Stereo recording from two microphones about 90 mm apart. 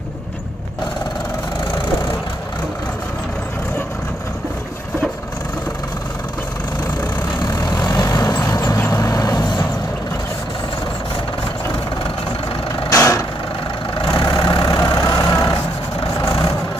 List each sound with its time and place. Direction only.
7.4 s vehicle: 50° left (ahead or behind)
12.9 s vehicle: 35° left (ahead or behind)
14.1 s vehicle: 55° left (ahead or behind)
16.0 s vehicle: 70° left (ahead or behind)